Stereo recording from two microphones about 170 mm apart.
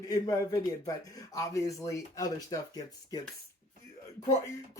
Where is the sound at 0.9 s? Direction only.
20° left (ahead or behind).